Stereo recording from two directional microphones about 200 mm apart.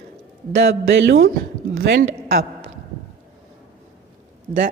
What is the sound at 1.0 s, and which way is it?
A woman's voice, 60° right (ahead or behind).